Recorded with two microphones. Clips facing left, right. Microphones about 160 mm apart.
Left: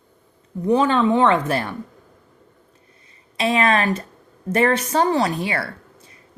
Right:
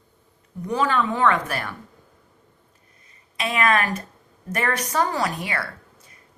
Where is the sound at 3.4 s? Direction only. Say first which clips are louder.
Left 3 dB; 30° left (ahead or behind).